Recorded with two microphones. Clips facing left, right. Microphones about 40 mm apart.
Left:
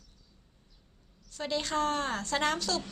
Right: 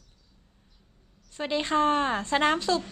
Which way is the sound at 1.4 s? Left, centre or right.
Right.